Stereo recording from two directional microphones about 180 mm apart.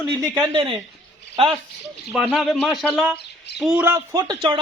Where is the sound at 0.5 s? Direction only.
30° right (ahead or behind).